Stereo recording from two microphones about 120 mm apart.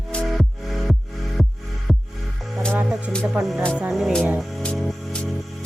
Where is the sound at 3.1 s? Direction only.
5° left (ahead or behind).